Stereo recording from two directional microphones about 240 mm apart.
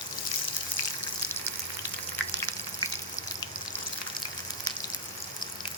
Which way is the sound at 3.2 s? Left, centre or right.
Centre.